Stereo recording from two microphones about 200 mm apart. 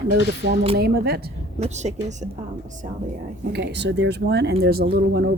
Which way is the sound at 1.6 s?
35° right (ahead or behind).